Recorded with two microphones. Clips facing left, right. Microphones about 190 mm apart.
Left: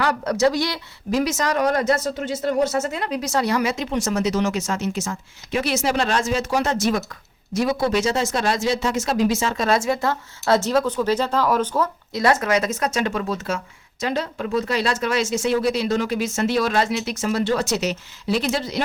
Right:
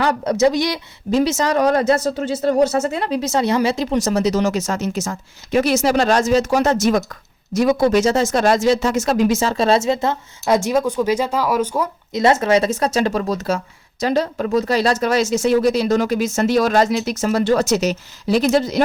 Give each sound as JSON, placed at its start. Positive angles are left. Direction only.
{"t": 0.0, "sound": "speech", "side_deg": -20}
{"t": 12.2, "sound": "speech", "side_deg": -25}